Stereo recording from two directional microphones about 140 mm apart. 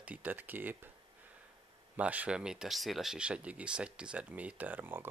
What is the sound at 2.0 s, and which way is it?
Speech, 10° right (ahead or behind).